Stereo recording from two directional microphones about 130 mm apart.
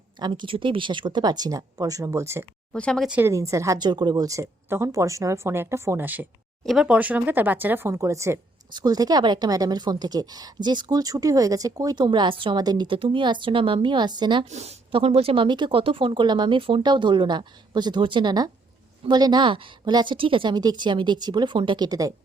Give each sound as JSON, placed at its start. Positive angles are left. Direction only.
{"t": 0.2, "sound": "a woman's voice", "side_deg": -35}
{"t": 2.7, "sound": "speech", "side_deg": 5}
{"t": 3.1, "sound": "a woman's voice", "side_deg": -15}
{"t": 14.5, "sound": "a woman's voice", "side_deg": -55}